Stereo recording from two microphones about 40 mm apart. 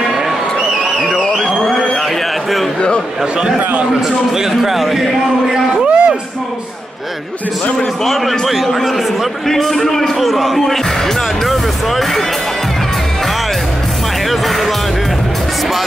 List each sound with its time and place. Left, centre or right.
3.4 s a man's voice: right
4.4 s speech: centre
5.9 s a sound: right
8.0 s a man's voice: centre
14.3 s music: centre